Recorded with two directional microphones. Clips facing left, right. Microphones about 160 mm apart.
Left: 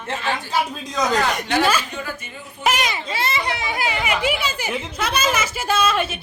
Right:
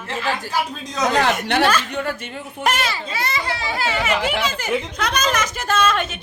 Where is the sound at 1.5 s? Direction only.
65° right (ahead or behind).